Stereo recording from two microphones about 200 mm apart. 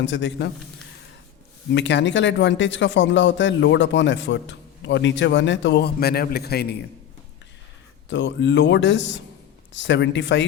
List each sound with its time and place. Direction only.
0.0 s speech: 65° left (ahead or behind)
1.7 s speech: 60° left (ahead or behind)
8.1 s speech: 60° left (ahead or behind)